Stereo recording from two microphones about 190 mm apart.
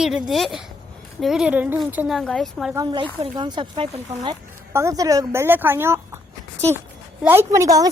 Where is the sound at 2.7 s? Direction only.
25° right (ahead or behind).